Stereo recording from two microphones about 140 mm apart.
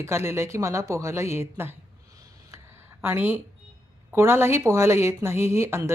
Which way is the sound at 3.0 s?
15° right (ahead or behind).